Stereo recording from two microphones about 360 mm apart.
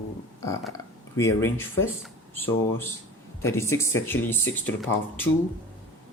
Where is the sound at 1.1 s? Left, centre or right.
Centre.